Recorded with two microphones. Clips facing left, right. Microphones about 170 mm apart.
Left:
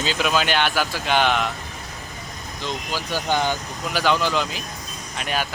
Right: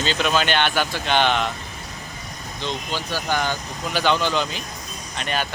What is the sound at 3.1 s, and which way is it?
Speech, 15° left (ahead or behind).